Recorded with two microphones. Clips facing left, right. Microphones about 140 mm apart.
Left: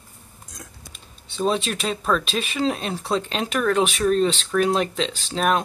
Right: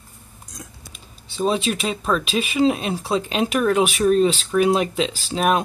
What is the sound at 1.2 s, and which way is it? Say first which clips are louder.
Speech: right 2 dB; centre (ahead or behind).